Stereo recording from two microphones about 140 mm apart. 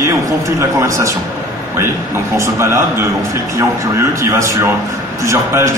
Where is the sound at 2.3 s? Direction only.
20° right (ahead or behind).